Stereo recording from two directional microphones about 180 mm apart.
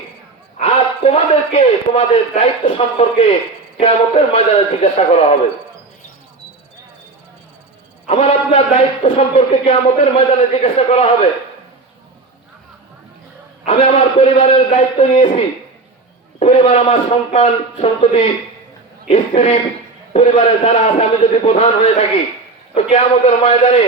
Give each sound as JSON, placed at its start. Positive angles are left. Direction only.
{"t": 0.6, "sound": "a man's voice", "side_deg": 35}
{"t": 8.0, "sound": "a man's voice", "side_deg": 35}
{"t": 13.7, "sound": "a man's voice", "side_deg": 35}